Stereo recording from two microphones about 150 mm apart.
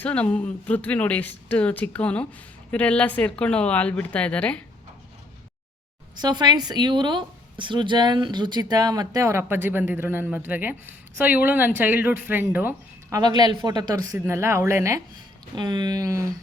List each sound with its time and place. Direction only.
0.0 s a woman's voice: 10° left (ahead or behind)
6.2 s a woman's voice: 30° right (ahead or behind)